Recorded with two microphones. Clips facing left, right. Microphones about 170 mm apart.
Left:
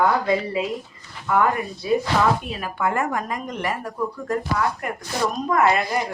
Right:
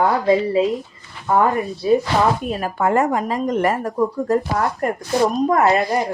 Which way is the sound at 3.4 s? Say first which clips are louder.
Right 9 dB; 45° right (ahead or behind).